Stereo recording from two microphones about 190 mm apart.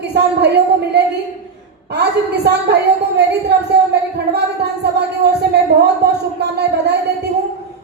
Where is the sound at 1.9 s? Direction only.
60° right (ahead or behind).